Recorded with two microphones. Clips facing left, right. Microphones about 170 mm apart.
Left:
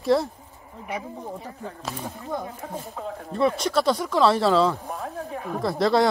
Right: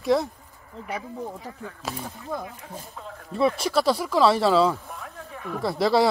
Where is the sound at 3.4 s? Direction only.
5° right (ahead or behind).